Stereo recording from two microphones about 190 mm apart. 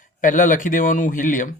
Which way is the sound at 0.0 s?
45° left (ahead or behind).